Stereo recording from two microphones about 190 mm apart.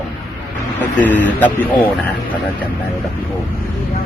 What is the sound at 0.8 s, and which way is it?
Speech, 10° left (ahead or behind).